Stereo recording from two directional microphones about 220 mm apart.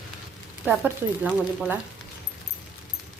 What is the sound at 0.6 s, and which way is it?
Speech, 5° right (ahead or behind).